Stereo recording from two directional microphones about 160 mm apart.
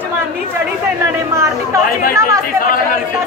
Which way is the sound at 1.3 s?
20° right (ahead or behind).